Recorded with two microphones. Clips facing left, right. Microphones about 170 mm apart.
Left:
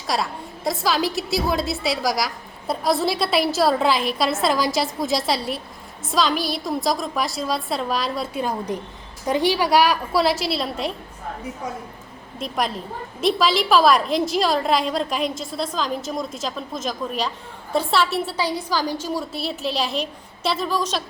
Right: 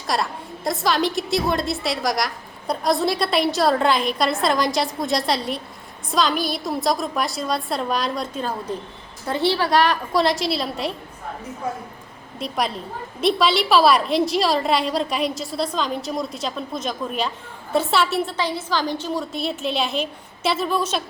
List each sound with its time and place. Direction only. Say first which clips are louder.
0.1 s a woman's voice: right 1 dB; centre (ahead or behind)
12.4 s a woman's voice: even; centre (ahead or behind)
18.3 s a woman's voice: even; 10° left (ahead or behind)